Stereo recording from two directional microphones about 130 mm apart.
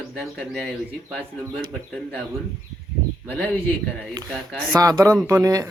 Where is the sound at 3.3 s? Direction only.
10° left (ahead or behind).